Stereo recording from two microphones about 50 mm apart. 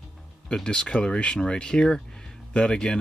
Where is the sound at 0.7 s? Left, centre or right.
Centre.